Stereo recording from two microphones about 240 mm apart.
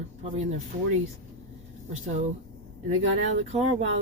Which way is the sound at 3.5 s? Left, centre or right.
Right.